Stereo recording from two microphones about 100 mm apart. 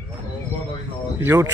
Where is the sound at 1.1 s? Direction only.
25° right (ahead or behind).